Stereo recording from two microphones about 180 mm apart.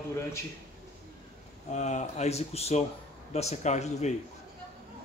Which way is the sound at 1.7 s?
40° left (ahead or behind).